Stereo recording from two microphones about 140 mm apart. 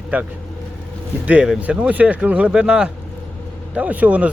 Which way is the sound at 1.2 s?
10° right (ahead or behind).